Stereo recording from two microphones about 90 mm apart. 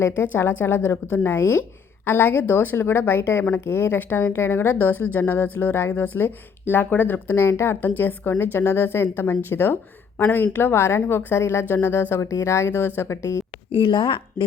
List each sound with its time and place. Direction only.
0.0 s a woman's voice: 30° left (ahead or behind)
13.7 s speech: 65° left (ahead or behind)